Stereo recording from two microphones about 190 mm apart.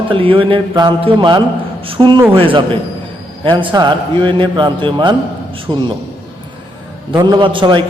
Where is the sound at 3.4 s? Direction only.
25° right (ahead or behind).